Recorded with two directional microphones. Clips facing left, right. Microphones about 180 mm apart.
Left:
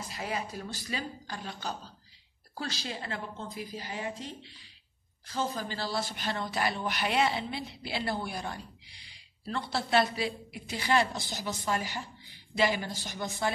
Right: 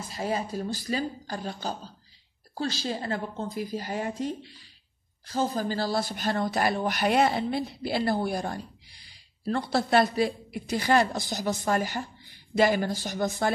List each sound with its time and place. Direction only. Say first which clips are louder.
0.1 s speech: right 7 dB; 30° right (ahead or behind); by 13.5 s 45° right (ahead or behind)